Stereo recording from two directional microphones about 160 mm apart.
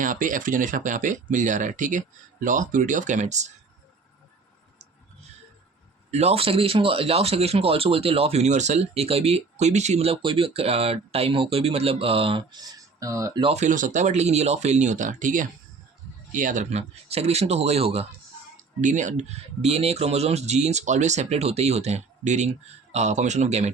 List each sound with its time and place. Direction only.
0.0 s speech: 55° right (ahead or behind)
6.1 s speech: 40° right (ahead or behind); by 13.4 s 20° right (ahead or behind)
13.4 s speech: 40° right (ahead or behind)
18.8 s speech: 50° right (ahead or behind)